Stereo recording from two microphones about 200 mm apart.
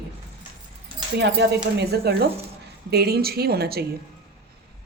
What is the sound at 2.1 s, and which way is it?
A woman's voice, 55° right (ahead or behind).